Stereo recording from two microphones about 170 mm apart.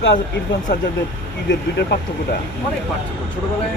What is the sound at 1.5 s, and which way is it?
Speech, 75° left (ahead or behind).